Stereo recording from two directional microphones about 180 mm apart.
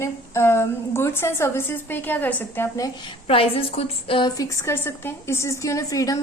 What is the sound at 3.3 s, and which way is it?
A woman's voice, 30° left (ahead or behind).